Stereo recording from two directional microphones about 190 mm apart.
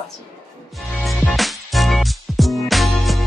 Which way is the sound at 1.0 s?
Centre (ahead or behind).